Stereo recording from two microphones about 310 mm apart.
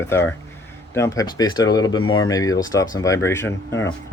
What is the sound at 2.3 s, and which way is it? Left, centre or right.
Speech, centre.